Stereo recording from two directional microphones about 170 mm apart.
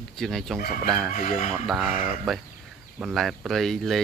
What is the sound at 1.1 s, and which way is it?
Speech, 50° left (ahead or behind).